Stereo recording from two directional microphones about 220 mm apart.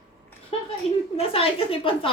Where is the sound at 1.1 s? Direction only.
25° left (ahead or behind).